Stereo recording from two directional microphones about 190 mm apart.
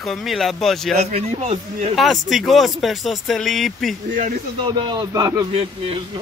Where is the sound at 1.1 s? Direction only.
35° right (ahead or behind).